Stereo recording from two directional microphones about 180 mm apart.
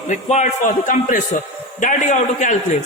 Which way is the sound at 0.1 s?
40° left (ahead or behind).